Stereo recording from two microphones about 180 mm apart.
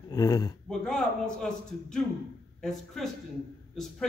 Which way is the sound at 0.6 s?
5° left (ahead or behind).